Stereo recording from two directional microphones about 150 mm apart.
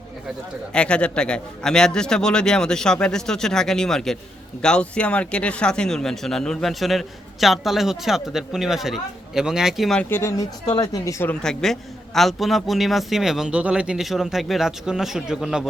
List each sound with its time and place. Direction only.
0.7 s speech: 5° left (ahead or behind)
10.1 s speech: 20° left (ahead or behind)
11.3 s speech: 5° left (ahead or behind)